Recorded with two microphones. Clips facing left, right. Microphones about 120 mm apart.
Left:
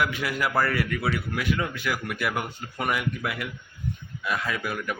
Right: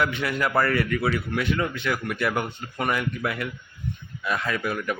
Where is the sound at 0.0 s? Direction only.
5° left (ahead or behind).